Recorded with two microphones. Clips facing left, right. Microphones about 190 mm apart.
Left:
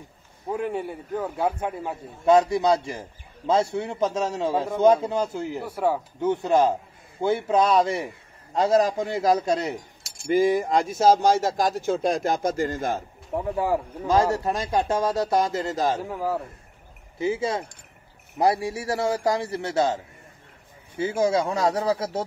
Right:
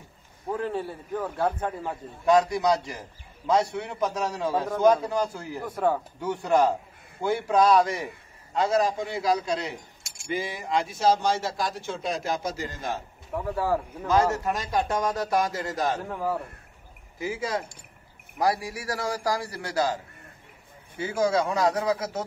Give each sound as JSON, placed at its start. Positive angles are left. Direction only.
{"t": 0.5, "sound": "a man's voice", "side_deg": 15}
{"t": 2.2, "sound": "a man's voice", "side_deg": 25}
{"t": 5.6, "sound": "a man's voice", "side_deg": 10}
{"t": 6.2, "sound": "a man's voice", "side_deg": 25}
{"t": 8.5, "sound": "speech", "side_deg": 40}
{"t": 13.3, "sound": "a man's voice", "side_deg": 15}
{"t": 14.0, "sound": "a man's voice", "side_deg": 30}
{"t": 16.0, "sound": "a man's voice", "side_deg": 10}
{"t": 17.2, "sound": "a man's voice", "side_deg": 25}
{"t": 21.0, "sound": "a man's voice", "side_deg": 25}